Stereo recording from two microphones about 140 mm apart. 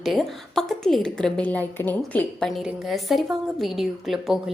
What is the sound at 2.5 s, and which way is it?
A woman's voice, centre (ahead or behind).